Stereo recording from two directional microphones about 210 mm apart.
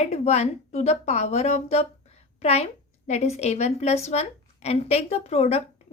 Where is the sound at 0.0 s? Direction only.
30° left (ahead or behind).